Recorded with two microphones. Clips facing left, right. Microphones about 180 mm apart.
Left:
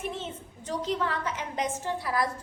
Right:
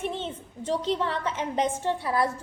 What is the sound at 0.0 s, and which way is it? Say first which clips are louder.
A woman's voice: right 3 dB; 30° right (ahead or behind).